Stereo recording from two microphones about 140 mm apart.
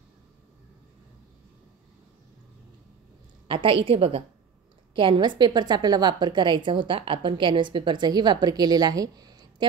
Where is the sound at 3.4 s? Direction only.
40° right (ahead or behind).